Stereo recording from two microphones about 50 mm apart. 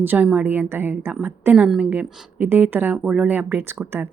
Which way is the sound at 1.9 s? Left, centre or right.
Right.